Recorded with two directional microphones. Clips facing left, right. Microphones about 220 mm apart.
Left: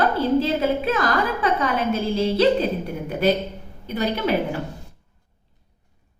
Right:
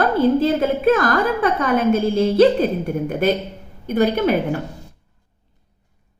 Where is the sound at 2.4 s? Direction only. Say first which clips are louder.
Right 5 dB; 50° right (ahead or behind).